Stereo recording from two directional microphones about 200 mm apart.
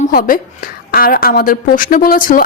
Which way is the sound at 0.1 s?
45° left (ahead or behind).